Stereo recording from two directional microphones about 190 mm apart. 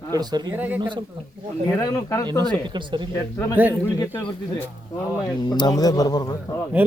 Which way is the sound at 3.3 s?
15° left (ahead or behind).